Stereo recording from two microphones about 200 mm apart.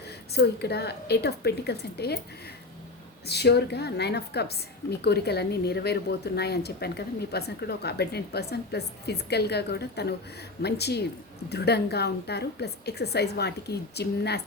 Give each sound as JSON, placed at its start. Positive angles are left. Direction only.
{"t": 0.3, "sound": "a woman's voice", "side_deg": 55}
{"t": 3.2, "sound": "a woman's voice", "side_deg": 55}